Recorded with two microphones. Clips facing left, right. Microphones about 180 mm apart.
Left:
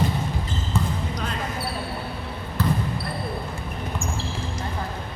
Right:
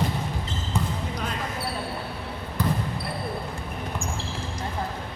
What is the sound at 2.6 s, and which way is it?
Basketball bounce, 15° right (ahead or behind).